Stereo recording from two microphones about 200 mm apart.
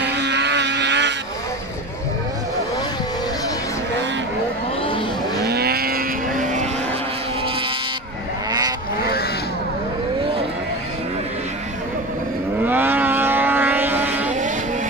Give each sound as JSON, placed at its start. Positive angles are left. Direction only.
{"t": 0.0, "sound": "vehicle", "side_deg": -55}
{"t": 5.4, "sound": "vehicle", "side_deg": -55}
{"t": 8.5, "sound": "vehicle", "side_deg": -20}
{"t": 12.6, "sound": "vehicle", "side_deg": -10}